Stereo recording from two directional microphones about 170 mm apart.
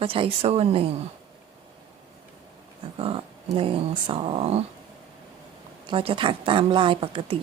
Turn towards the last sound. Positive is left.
turn(degrees=-30)  # may be behind; listen again after turning